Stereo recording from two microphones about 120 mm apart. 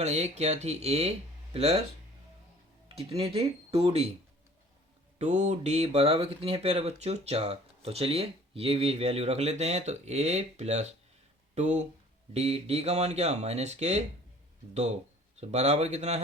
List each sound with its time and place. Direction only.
0.0 s speech: 65° right (ahead or behind)
2.9 s speech: 55° right (ahead or behind)
5.1 s speech: 70° right (ahead or behind)
12.3 s speech: 60° right (ahead or behind)